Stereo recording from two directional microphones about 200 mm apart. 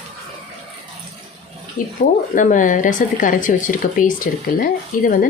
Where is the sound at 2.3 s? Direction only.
40° left (ahead or behind).